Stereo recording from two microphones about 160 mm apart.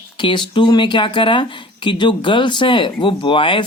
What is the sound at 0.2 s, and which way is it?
Speech, 30° left (ahead or behind).